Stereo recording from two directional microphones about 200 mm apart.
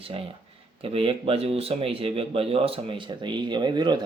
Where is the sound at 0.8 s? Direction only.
30° right (ahead or behind).